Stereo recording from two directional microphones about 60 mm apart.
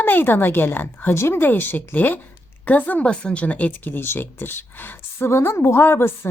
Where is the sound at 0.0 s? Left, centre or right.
Left.